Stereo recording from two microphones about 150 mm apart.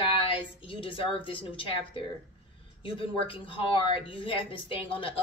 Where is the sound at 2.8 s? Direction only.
35° left (ahead or behind).